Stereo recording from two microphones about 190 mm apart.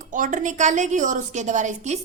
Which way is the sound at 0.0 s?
40° right (ahead or behind).